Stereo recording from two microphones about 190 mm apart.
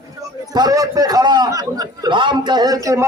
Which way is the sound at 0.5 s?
20° right (ahead or behind).